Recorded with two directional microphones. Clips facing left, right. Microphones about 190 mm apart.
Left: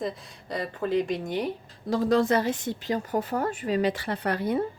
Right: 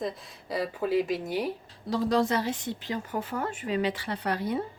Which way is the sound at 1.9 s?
50° left (ahead or behind).